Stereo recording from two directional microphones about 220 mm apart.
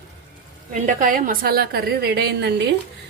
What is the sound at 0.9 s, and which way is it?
A woman's voice, 35° right (ahead or behind).